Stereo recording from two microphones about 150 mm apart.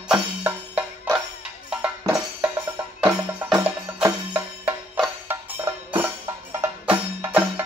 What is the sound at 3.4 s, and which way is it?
Music, 5° right (ahead or behind).